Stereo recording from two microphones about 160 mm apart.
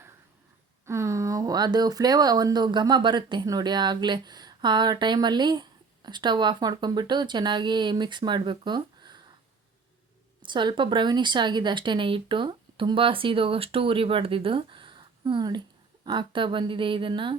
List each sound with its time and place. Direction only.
0.9 s speech: 15° right (ahead or behind)
10.4 s speech: 30° right (ahead or behind)